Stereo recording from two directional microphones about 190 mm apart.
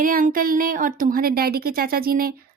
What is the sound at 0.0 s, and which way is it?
A woman's voice, 50° right (ahead or behind).